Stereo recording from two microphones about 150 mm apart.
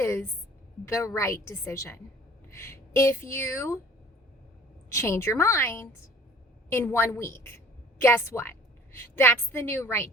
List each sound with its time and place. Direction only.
0.0 s a sound: 15° left (ahead or behind)
0.9 s a woman's voice: 20° left (ahead or behind)
4.9 s a woman's voice: 20° left (ahead or behind)